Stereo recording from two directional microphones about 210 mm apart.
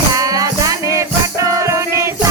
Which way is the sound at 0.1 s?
15° right (ahead or behind).